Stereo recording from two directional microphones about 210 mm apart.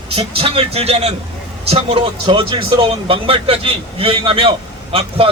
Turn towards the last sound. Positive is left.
turn(degrees=-25)  # may be behind; listen again after turning